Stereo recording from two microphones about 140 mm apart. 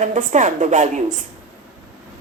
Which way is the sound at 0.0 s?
65° right (ahead or behind).